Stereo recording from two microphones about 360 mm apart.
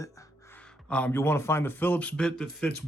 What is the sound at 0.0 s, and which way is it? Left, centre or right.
Speech, centre.